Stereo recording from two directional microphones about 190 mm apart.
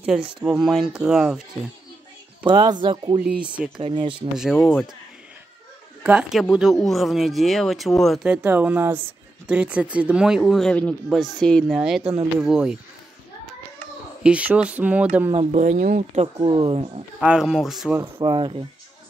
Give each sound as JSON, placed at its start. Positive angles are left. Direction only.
{"t": 0.3, "sound": "speech", "side_deg": -5}
{"t": 2.4, "sound": "speech", "side_deg": -25}
{"t": 3.4, "sound": "speech", "side_deg": -5}
{"t": 3.8, "sound": "speech", "side_deg": -25}
{"t": 4.6, "sound": "speech", "side_deg": 10}
{"t": 6.0, "sound": "speech", "side_deg": -5}
{"t": 14.2, "sound": "speech", "side_deg": -5}
{"t": 15.3, "sound": "speech", "side_deg": -40}
{"t": 17.2, "sound": "speech", "side_deg": -5}
{"t": 18.1, "sound": "speech", "side_deg": -20}